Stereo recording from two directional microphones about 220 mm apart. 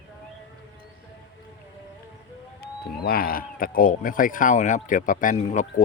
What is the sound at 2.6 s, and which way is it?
Speech, 45° left (ahead or behind).